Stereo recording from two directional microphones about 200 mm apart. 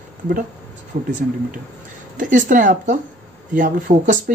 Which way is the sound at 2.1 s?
40° right (ahead or behind).